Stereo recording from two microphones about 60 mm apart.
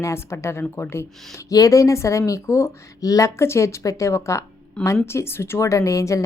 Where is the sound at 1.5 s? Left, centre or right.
Left.